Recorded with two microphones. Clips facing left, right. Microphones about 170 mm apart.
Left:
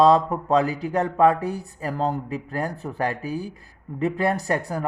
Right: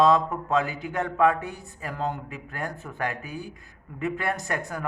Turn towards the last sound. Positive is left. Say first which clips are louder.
# left 6 dB
turn(degrees=35)  # may be behind; listen again after turning